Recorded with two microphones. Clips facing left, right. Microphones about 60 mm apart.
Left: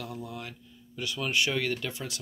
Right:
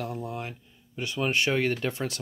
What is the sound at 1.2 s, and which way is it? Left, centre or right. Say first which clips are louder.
Speech: right 3 dB; right.